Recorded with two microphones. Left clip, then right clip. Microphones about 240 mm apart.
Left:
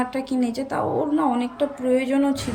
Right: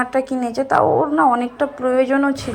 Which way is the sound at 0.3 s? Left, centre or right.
Right.